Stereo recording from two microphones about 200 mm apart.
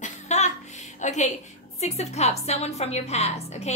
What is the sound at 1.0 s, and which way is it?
A woman's voice, 35° left (ahead or behind).